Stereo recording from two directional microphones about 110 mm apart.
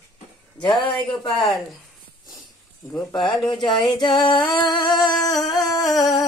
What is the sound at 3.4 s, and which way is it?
Speech, 45° left (ahead or behind).